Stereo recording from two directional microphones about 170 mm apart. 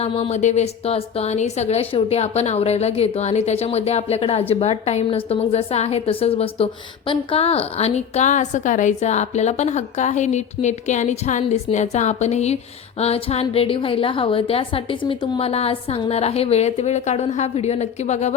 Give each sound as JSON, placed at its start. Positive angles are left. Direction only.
{"t": 0.0, "sound": "a woman's voice", "side_deg": 35}